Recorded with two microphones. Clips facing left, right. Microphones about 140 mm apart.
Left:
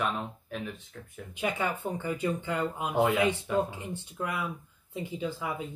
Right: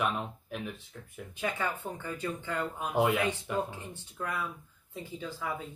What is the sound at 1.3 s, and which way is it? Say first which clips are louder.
Speech: left 3 dB; 15° left (ahead or behind).